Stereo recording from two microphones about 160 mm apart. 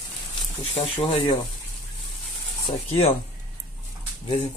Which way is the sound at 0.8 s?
35° left (ahead or behind).